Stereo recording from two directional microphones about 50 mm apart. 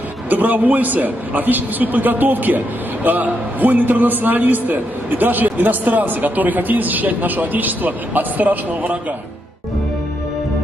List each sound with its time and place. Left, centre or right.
0.3 s a man's voice: right